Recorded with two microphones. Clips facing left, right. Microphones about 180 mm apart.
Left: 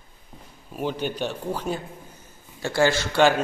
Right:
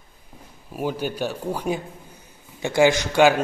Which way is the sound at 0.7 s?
5° right (ahead or behind).